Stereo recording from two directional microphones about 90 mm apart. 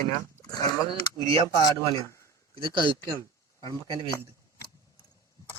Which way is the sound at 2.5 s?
65° right (ahead or behind).